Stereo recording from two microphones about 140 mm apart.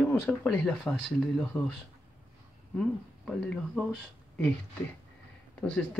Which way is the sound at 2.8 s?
5° left (ahead or behind).